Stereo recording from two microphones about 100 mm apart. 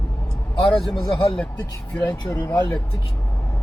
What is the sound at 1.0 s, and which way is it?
Speech, 55° left (ahead or behind).